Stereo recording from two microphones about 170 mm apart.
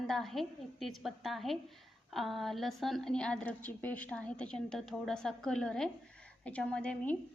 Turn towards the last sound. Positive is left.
turn(degrees=5)  # may be behind; listen again after turning